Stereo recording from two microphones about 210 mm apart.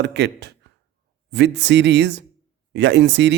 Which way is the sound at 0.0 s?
55° right (ahead or behind).